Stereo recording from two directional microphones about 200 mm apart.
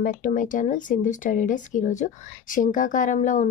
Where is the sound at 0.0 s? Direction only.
40° left (ahead or behind).